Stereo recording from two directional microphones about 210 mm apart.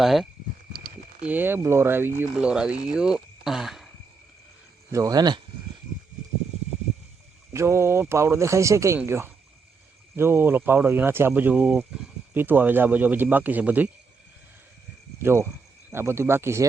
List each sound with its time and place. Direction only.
0.0 s speech: centre (ahead or behind)
0.7 s a sound: 45° right (ahead or behind)
1.2 s speech: 10° right (ahead or behind)
4.9 s speech: 15° right (ahead or behind)
7.5 s speech: 15° right (ahead or behind)
15.2 s speech: 10° right (ahead or behind)